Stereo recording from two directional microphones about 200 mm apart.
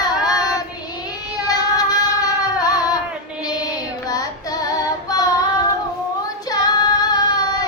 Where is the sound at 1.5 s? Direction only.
20° left (ahead or behind).